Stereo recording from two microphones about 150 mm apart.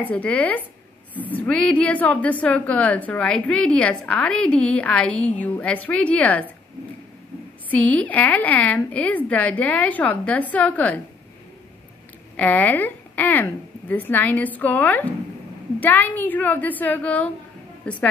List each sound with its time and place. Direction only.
0.0 s a woman's voice: 10° left (ahead or behind)
7.7 s a woman's voice: 10° left (ahead or behind)
12.4 s a woman's voice: 10° left (ahead or behind)